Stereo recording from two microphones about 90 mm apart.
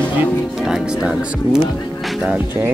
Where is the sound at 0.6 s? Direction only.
5° right (ahead or behind).